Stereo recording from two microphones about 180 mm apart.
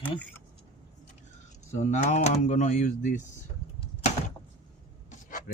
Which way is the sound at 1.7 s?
40° left (ahead or behind).